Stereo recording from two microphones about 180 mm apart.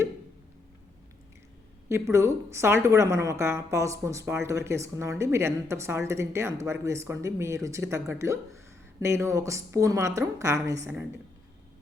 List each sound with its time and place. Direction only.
1.9 s a woman's voice: 15° right (ahead or behind)